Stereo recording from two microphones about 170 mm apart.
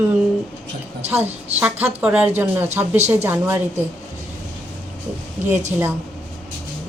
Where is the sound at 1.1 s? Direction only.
10° right (ahead or behind).